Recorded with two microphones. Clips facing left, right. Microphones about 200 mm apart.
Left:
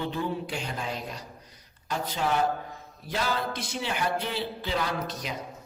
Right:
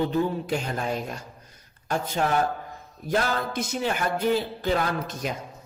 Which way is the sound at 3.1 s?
45° right (ahead or behind).